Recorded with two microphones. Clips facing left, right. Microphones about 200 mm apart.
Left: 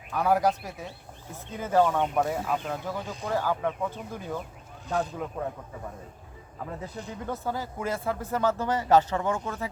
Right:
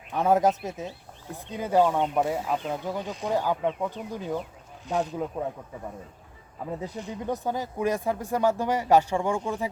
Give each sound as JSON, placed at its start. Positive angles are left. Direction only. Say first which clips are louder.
{"t": 0.1, "sound": "speech", "louder": "right 2 dB", "side_deg": -25}
{"t": 5.4, "sound": "speech", "louder": "even", "side_deg": -15}
{"t": 6.7, "sound": "speech", "louder": "right 5 dB", "side_deg": -15}